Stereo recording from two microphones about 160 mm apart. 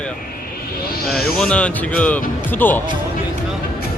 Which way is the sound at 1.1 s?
5° left (ahead or behind).